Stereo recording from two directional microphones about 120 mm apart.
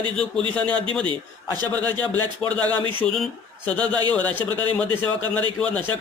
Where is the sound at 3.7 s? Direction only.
15° left (ahead or behind).